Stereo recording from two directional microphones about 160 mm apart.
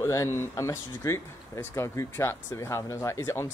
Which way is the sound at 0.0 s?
20° left (ahead or behind).